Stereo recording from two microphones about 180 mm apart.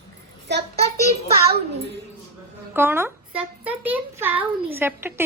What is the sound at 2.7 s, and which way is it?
A child's voice, 15° right (ahead or behind).